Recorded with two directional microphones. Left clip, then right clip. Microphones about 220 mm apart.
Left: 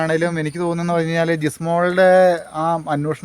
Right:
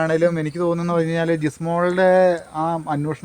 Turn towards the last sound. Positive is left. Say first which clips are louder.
# left 3 dB
turn(degrees=50)  # may be behind; listen again after turning